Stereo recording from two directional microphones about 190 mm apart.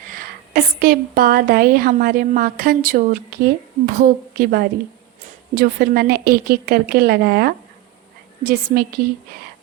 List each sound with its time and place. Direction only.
0.1 s a woman's voice: 50° right (ahead or behind)